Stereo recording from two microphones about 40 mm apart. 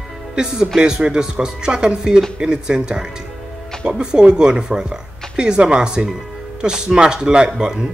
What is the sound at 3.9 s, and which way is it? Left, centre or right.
Speech, right.